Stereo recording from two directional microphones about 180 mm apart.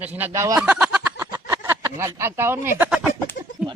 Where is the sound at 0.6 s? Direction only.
5° right (ahead or behind).